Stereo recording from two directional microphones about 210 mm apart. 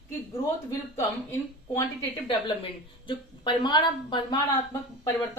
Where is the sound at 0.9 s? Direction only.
15° left (ahead or behind).